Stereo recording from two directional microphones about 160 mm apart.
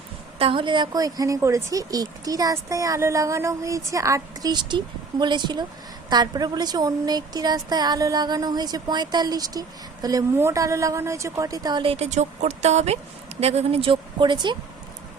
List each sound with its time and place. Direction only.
0.3 s a woman's voice: 35° right (ahead or behind)